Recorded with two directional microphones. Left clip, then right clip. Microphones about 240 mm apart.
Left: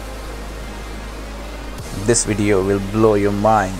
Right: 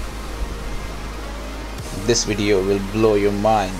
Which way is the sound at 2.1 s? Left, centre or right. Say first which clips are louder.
Left 1 dB; centre.